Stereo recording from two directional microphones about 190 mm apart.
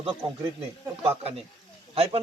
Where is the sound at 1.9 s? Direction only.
30° right (ahead or behind).